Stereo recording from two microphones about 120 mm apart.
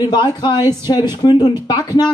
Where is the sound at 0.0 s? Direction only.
35° left (ahead or behind).